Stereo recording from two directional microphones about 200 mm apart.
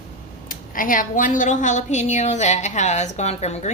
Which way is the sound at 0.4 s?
45° left (ahead or behind).